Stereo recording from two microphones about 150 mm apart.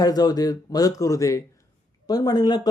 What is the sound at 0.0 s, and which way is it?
Speech, 25° left (ahead or behind).